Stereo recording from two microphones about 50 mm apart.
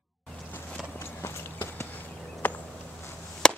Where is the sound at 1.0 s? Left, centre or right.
Left.